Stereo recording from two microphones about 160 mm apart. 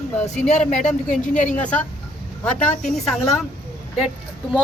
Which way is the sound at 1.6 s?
10° left (ahead or behind).